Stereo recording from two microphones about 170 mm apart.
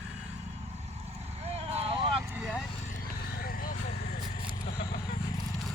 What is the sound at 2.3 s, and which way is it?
Vehicle, 5° right (ahead or behind).